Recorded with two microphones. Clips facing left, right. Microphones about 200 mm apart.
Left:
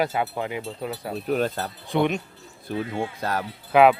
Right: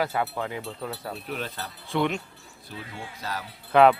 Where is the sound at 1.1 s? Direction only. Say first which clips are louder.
Left 9 dB; 45° left (ahead or behind).